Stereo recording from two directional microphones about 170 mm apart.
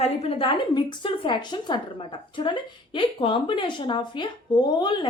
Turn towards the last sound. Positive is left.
turn(degrees=25)  # may be behind; listen again after turning